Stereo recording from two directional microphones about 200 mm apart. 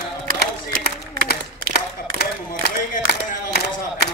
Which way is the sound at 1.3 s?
50° left (ahead or behind).